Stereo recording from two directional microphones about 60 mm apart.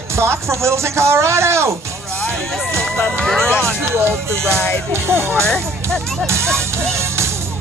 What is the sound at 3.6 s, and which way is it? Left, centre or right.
Speech, right.